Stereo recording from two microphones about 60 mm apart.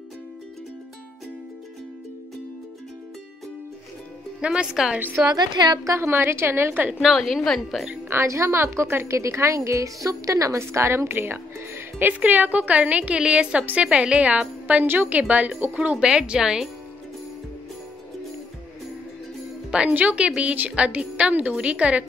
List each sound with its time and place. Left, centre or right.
4.4 s speech: centre
5.2 s a woman's voice: right
5.9 s a woman's voice: right
7.1 s a woman's voice: centre
8.1 s a woman's voice: right
12.1 s speech: right; by 16.6 s centre
19.7 s speech: centre